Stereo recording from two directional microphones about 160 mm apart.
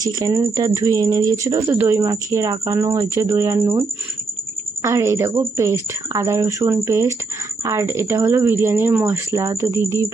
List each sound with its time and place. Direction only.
0.0 s speech: 25° right (ahead or behind)